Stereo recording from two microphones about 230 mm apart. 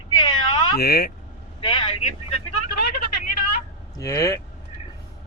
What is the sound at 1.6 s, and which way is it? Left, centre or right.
Vehicle, left.